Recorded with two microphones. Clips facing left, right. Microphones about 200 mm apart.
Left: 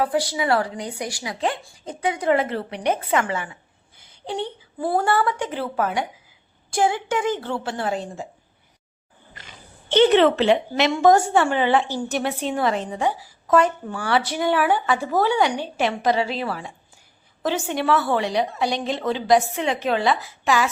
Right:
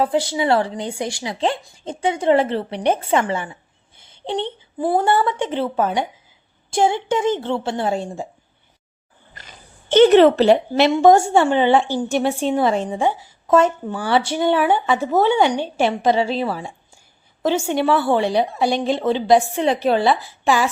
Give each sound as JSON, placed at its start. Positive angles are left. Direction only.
{"t": 0.0, "sound": "a woman's voice", "side_deg": -25}
{"t": 9.9, "sound": "a woman's voice", "side_deg": -45}
{"t": 10.9, "sound": "a woman's voice", "side_deg": -25}